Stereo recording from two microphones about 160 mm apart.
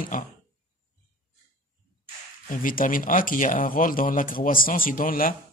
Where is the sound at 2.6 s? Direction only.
60° left (ahead or behind).